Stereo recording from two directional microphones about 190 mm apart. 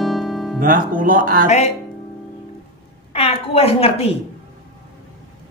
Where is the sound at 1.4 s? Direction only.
35° left (ahead or behind).